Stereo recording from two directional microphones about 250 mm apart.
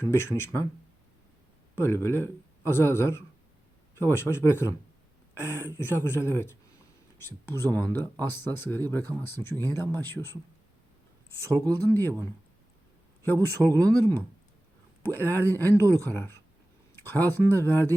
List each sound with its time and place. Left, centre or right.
0.1 s speech: centre
1.8 s speech: centre
11.4 s speech: centre
11.9 s speech: centre
13.2 s speech: centre
13.7 s speech: centre
15.1 s speech: centre